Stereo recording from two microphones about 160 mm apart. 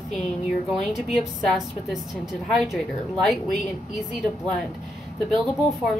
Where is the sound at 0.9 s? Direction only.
Centre (ahead or behind).